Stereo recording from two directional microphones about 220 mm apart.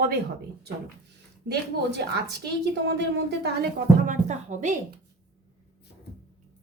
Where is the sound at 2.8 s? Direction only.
50° right (ahead or behind).